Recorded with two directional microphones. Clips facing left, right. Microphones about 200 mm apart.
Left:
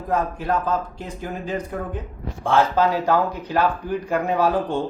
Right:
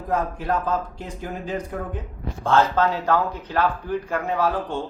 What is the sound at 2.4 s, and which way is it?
Speech, 10° left (ahead or behind).